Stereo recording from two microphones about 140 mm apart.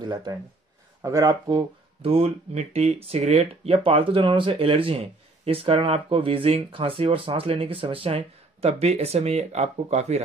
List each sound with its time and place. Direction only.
0.0 s speech: 30° right (ahead or behind)
2.0 s speech: 45° right (ahead or behind)